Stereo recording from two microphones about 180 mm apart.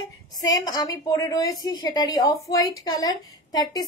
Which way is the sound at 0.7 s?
20° left (ahead or behind).